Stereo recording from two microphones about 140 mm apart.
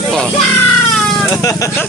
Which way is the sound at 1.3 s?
20° left (ahead or behind).